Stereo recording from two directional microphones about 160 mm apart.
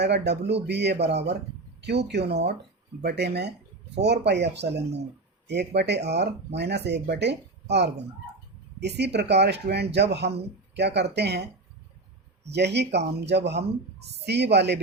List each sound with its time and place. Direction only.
0.0 s speech: 90° right
12.5 s speech: 90° right